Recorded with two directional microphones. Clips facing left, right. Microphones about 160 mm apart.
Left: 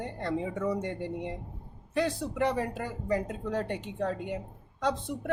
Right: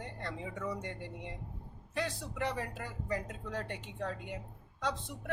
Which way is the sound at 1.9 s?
25° left (ahead or behind).